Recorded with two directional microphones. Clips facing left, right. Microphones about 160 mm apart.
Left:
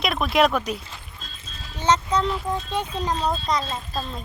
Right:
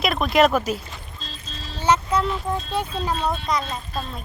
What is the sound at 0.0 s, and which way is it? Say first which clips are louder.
Speech: right 2 dB; centre (ahead or behind).